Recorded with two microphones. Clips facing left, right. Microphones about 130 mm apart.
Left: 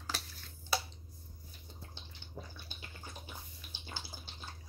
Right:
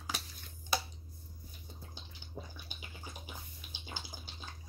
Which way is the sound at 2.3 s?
15° right (ahead or behind).